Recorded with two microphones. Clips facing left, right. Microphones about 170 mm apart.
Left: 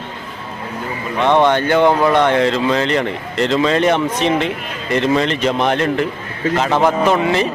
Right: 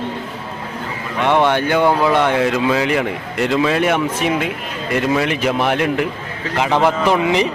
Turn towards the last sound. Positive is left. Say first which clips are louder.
# even
turn(degrees=-15)  # may be behind; listen again after turning